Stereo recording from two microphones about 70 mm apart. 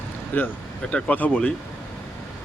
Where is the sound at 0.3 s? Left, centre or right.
Left.